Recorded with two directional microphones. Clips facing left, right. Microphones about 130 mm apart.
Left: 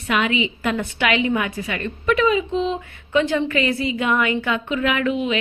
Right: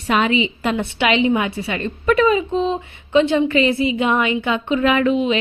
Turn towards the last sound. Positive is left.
turn(degrees=-30)  # may be behind; listen again after turning